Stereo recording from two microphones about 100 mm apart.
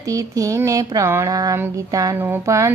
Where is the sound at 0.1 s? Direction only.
35° right (ahead or behind).